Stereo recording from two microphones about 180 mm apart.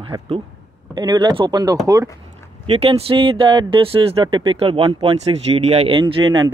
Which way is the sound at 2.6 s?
30° right (ahead or behind).